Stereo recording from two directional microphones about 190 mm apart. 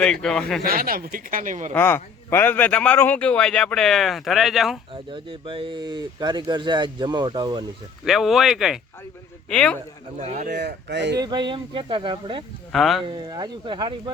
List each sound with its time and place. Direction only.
0.0 s speech: 5° left (ahead or behind)
0.6 s speech: 50° right (ahead or behind)
1.7 s a man's voice: 10° left (ahead or behind)
5.1 s speech: 25° right (ahead or behind)
8.0 s speech: centre (ahead or behind)
10.2 s speech: 40° right (ahead or behind)
10.5 s speech: 60° right (ahead or behind)
11.2 s speech: 25° right (ahead or behind)
12.7 s speech: centre (ahead or behind)
13.1 s speech: 25° right (ahead or behind)